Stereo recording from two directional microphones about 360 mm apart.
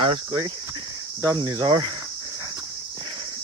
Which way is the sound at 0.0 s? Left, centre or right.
Centre.